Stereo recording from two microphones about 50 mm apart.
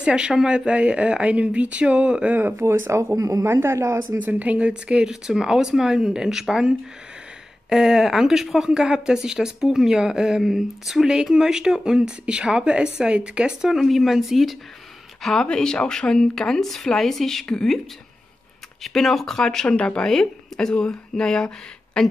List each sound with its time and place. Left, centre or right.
0.0 s a woman's voice: centre
2.3 s speech: right
2.9 s speech: right
4.3 s speech: right; by 6.7 s centre
7.7 s a woman's voice: centre
13.7 s speech: centre
15.4 s speech: centre
18.8 s speech: centre